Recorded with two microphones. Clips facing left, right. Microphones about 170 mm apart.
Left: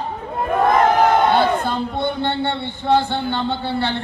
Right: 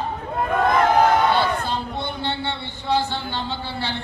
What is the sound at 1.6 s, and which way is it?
A man's voice, 50° left (ahead or behind).